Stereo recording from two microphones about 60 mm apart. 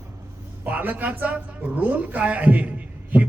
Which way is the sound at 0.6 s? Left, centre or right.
Right.